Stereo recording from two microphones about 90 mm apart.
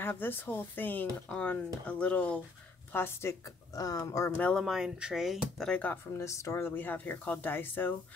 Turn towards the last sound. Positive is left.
turn(degrees=20)  # may be behind; listen again after turning